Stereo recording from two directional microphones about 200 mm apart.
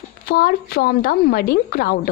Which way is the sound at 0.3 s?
50° left (ahead or behind).